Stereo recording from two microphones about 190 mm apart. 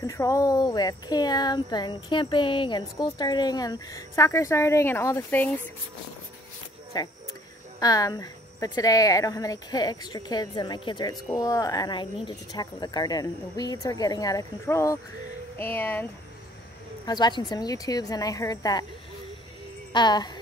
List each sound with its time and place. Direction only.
0.0 s speech: 15° left (ahead or behind)
6.9 s speech: 20° left (ahead or behind)
17.0 s speech: 20° left (ahead or behind)
19.9 s speech: 25° left (ahead or behind)